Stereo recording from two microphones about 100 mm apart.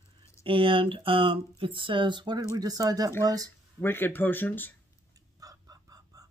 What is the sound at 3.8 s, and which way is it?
Speech, 20° left (ahead or behind).